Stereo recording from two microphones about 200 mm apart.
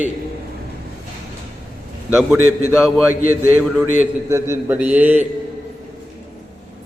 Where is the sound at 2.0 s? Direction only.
5° right (ahead or behind).